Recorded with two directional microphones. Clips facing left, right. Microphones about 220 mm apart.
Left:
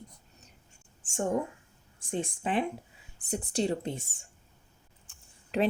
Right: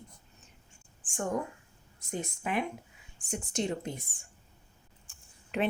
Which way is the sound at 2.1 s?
30° left (ahead or behind).